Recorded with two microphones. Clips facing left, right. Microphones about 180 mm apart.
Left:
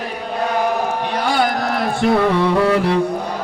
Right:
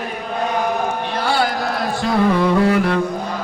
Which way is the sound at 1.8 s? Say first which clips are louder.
Left 2 dB; 25° left (ahead or behind).